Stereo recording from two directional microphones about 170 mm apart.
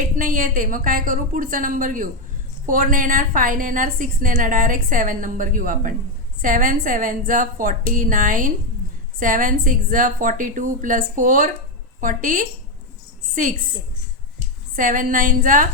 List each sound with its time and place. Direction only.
0.0 s a woman's voice: 55° right (ahead or behind)
14.8 s a woman's voice: 50° right (ahead or behind)